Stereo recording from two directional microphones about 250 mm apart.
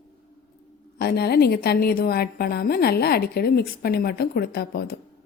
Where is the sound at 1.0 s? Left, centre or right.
Left.